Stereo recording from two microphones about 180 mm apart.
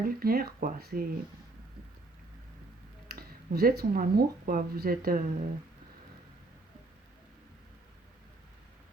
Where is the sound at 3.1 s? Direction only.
60° right (ahead or behind).